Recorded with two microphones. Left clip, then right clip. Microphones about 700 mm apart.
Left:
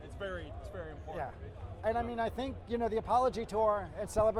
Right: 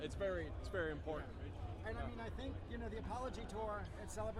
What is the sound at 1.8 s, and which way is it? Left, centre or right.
A man's voice, left.